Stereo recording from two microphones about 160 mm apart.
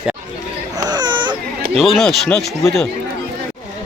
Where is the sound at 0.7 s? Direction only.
25° right (ahead or behind).